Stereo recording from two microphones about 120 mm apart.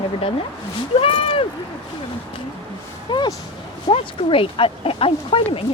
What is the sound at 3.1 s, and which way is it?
Speech, 40° left (ahead or behind).